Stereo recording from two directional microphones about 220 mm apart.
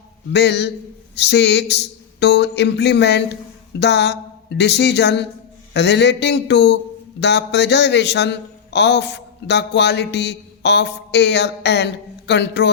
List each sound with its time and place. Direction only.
0.3 s a man's voice: 50° left (ahead or behind)